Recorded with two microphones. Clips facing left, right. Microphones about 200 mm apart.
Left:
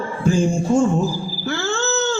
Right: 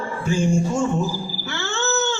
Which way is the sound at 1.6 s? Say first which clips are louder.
Left 1 dB; 35° left (ahead or behind).